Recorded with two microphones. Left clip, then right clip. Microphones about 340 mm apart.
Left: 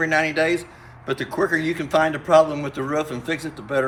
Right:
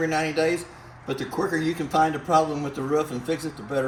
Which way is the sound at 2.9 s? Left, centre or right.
Centre.